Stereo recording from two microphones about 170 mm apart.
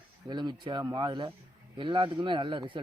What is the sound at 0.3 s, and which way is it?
Speech, 25° right (ahead or behind).